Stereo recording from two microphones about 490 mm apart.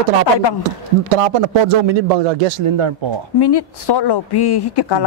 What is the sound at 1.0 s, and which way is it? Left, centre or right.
Speech, right.